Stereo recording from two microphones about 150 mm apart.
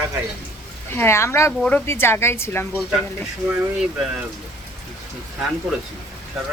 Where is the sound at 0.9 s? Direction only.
15° left (ahead or behind).